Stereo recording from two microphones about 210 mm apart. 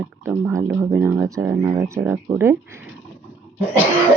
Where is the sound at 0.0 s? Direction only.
10° right (ahead or behind).